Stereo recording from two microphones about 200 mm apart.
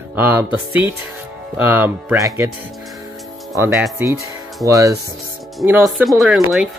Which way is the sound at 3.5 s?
10° right (ahead or behind).